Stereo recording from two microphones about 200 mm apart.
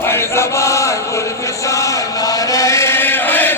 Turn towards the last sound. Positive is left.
turn(degrees=10)  # may be behind; listen again after turning